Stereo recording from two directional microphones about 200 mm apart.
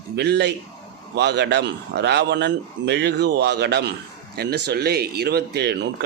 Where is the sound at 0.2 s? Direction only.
55° right (ahead or behind).